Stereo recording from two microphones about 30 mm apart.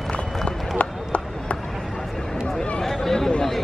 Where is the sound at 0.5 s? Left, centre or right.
Left.